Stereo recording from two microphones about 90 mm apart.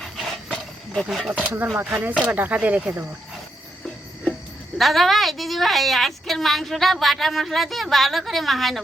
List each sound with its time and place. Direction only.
0.0 s a sound: centre (ahead or behind)
1.3 s speech: 15° right (ahead or behind)
4.8 s a woman's voice: centre (ahead or behind)